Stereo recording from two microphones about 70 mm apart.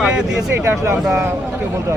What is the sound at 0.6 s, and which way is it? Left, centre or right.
Speech, right.